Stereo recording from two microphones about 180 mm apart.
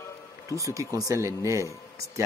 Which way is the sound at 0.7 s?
20° right (ahead or behind).